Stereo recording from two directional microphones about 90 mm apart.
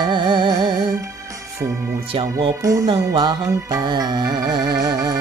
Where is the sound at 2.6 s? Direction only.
40° right (ahead or behind).